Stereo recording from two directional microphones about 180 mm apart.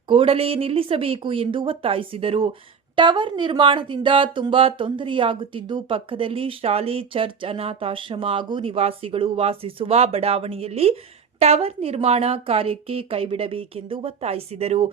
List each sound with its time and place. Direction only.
0.1 s a woman's voice: 30° right (ahead or behind)